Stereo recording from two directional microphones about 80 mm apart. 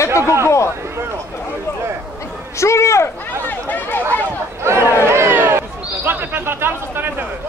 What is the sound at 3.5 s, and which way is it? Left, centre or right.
Chatter, left.